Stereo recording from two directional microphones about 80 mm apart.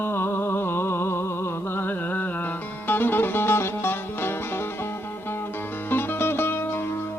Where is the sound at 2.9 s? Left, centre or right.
Left.